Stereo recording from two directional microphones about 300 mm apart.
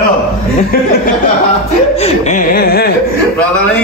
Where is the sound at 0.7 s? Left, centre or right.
Left.